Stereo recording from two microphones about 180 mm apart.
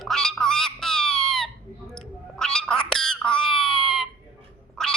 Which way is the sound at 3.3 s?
5° left (ahead or behind).